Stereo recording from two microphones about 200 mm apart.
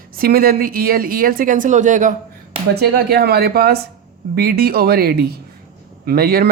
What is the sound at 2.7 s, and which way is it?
Speech, 50° right (ahead or behind).